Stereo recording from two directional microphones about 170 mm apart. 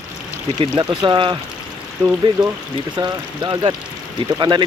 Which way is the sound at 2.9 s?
25° right (ahead or behind).